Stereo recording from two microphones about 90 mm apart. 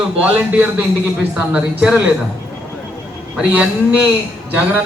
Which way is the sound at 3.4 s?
15° right (ahead or behind).